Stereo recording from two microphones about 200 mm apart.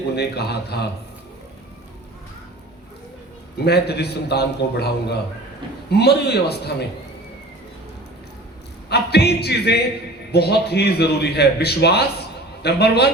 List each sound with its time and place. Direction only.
0.2 s a man's voice: 55° left (ahead or behind)
3.6 s a man's voice: 55° left (ahead or behind)
5.9 s a man's voice: 55° left (ahead or behind)
8.9 s a man's voice: 55° left (ahead or behind)